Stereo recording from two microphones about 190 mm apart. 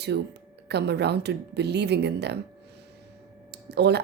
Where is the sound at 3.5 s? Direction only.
60° right (ahead or behind).